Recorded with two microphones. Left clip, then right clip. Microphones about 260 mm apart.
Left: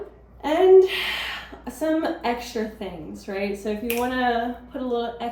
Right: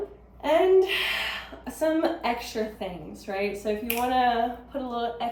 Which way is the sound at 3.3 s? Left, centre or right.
Centre.